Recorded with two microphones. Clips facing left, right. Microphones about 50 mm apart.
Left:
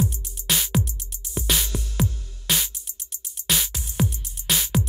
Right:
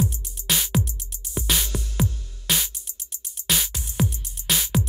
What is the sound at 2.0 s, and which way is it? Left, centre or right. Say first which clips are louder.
Music: even; centre.